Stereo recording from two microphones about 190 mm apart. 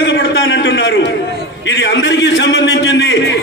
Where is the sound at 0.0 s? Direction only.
65° left (ahead or behind).